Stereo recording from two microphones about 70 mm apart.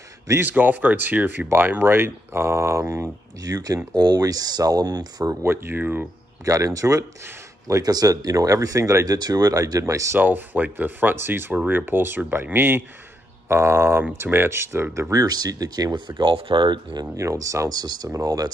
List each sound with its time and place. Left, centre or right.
0.4 s speech: right
3.4 s speech: right
5.3 s speech: right
6.4 s speech: right
7.6 s speech: right
10.1 s speech: right
15.2 s speech: right
17.2 s speech: right
17.7 s speech: right
18.1 s speech: right